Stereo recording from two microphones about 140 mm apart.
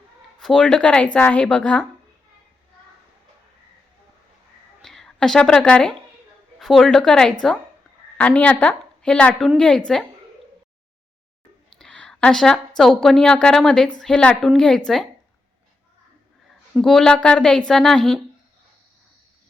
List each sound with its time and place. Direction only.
0.3 s a woman's voice: 5° left (ahead or behind)
4.8 s a woman's voice: 5° left (ahead or behind)
11.8 s a woman's voice: 5° left (ahead or behind)
16.7 s a woman's voice: centre (ahead or behind)